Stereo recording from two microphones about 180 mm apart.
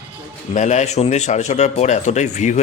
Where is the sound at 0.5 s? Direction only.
40° left (ahead or behind).